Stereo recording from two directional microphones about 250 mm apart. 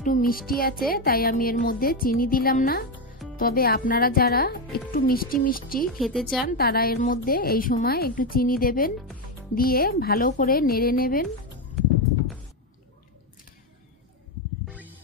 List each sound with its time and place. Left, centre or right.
0.0 s speech: left
5.9 s speech: centre
6.4 s speech: left